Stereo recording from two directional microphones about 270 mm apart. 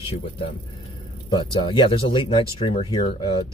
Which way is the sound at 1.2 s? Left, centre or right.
Centre.